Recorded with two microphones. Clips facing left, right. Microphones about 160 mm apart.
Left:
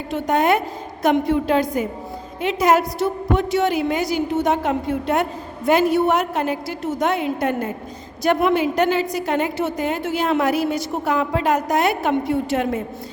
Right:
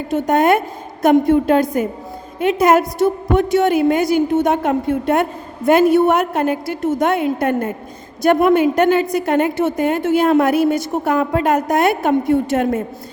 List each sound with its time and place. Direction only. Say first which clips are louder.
0.1 s a woman's voice: right 4 dB; 50° right (ahead or behind)